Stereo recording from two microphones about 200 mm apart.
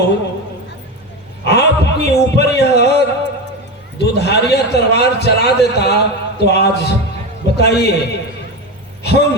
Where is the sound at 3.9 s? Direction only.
55° left (ahead or behind).